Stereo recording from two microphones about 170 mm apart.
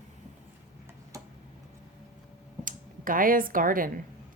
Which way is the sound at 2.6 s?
55° right (ahead or behind).